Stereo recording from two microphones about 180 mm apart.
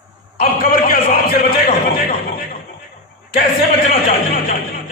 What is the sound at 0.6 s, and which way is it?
A man's voice, 55° left (ahead or behind).